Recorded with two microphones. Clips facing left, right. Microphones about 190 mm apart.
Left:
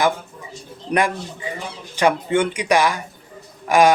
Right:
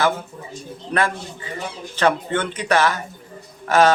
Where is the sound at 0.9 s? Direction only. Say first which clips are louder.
Left 2 dB; 15° left (ahead or behind).